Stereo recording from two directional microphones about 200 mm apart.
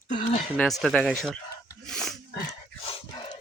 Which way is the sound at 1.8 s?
Centre (ahead or behind).